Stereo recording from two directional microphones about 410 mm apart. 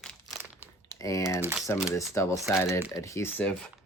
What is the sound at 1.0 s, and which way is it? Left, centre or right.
Speech, centre.